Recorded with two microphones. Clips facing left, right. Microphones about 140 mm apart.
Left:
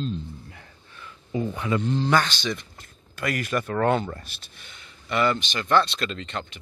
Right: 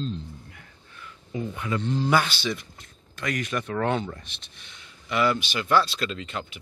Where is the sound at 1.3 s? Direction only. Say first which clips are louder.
Left 4 dB; 30° left (ahead or behind).